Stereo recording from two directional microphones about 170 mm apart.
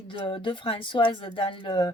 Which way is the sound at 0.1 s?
30° left (ahead or behind).